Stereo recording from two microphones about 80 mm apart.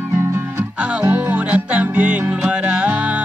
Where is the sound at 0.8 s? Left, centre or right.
Centre.